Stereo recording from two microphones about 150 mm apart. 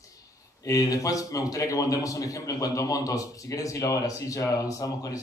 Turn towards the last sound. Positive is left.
turn(degrees=25)  # may be behind; listen again after turning